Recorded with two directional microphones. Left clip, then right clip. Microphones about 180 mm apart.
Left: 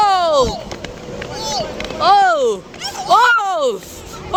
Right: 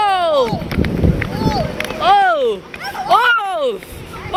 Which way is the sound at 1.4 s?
35° right (ahead or behind).